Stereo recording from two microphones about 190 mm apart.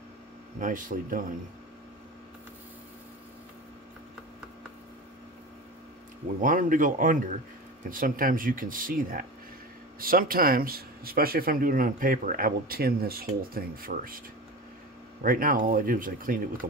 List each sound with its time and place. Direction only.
0.6 s speech: 45° right (ahead or behind)
6.4 s speech: 45° right (ahead or behind)
15.2 s speech: 50° right (ahead or behind)